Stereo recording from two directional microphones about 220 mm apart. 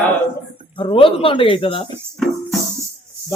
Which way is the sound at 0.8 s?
25° left (ahead or behind).